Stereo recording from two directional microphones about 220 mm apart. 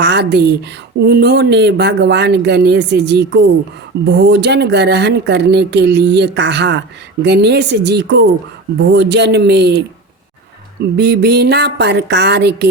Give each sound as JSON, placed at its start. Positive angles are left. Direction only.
{"t": 0.0, "sound": "speech", "side_deg": -50}
{"t": 10.9, "sound": "speech", "side_deg": -50}